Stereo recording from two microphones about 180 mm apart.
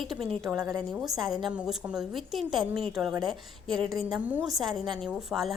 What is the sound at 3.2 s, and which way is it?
A woman's voice, 5° left (ahead or behind).